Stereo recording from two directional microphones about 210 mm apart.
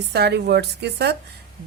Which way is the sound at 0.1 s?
50° right (ahead or behind).